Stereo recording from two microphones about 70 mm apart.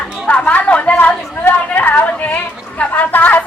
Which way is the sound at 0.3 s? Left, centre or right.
Centre.